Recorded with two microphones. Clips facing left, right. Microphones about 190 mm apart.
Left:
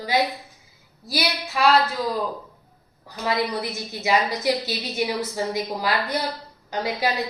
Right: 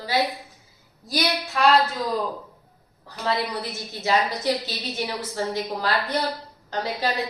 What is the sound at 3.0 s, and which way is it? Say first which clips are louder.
A woman's voice: left 1 dB; 10° left (ahead or behind).